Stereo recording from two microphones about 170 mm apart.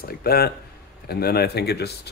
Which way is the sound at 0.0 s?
60° left (ahead or behind).